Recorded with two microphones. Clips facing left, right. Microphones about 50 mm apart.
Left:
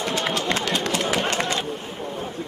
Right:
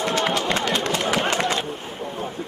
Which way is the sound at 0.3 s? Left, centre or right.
Centre.